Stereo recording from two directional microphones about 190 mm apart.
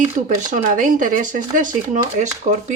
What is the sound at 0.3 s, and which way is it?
Speech, 45° right (ahead or behind).